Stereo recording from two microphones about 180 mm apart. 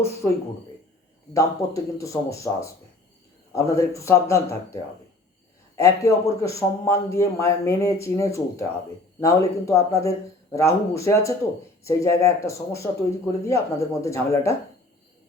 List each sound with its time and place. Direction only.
1.3 s a man's voice: 15° left (ahead or behind)